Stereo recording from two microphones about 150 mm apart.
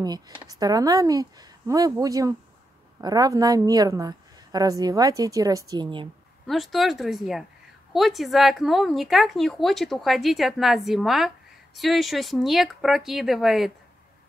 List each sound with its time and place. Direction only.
0.0 s a woman's voice: 25° right (ahead or behind)
6.4 s speech: centre (ahead or behind)